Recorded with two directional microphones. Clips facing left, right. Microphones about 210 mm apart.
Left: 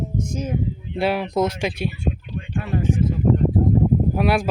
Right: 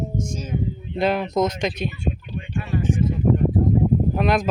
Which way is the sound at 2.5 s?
60° left (ahead or behind).